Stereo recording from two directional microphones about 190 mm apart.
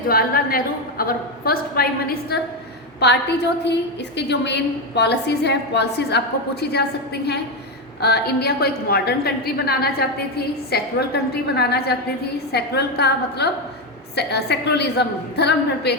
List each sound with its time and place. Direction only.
0.1 s a woman's voice: 50° left (ahead or behind)